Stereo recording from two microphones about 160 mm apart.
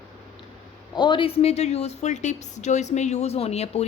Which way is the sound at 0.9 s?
30° left (ahead or behind).